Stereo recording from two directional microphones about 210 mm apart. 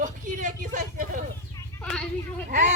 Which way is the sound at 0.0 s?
40° right (ahead or behind).